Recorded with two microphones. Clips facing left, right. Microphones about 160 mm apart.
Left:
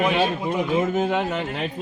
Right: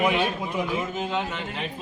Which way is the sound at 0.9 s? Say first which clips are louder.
Left 6 dB; 50° left (ahead or behind).